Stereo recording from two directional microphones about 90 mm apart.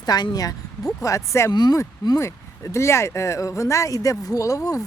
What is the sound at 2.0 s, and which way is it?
Speech, 35° left (ahead or behind).